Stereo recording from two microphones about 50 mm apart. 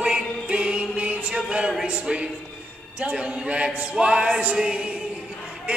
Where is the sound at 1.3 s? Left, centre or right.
Centre.